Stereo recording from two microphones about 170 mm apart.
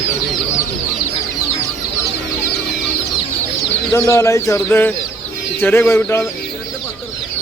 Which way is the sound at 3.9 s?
15° left (ahead or behind).